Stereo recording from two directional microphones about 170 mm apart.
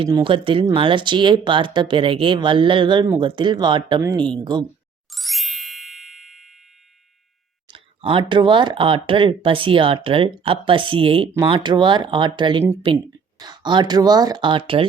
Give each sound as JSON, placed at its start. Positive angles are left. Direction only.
{"t": 0.0, "sound": "speech", "side_deg": -25}
{"t": 5.1, "sound": "ding", "side_deg": 0}
{"t": 7.7, "sound": "speech", "side_deg": -30}